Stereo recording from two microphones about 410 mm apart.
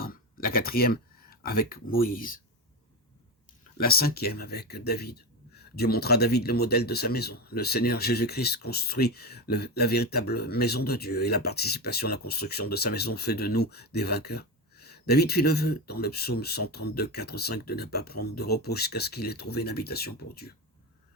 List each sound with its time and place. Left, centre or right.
0.0 s speech: left
3.8 s speech: left